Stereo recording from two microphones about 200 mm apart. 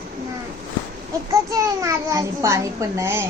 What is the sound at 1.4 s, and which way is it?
A woman's voice, 15° right (ahead or behind).